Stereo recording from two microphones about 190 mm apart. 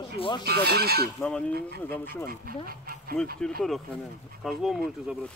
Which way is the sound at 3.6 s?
Centre (ahead or behind).